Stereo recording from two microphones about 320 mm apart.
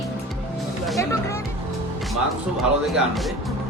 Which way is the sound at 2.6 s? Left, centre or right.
Centre.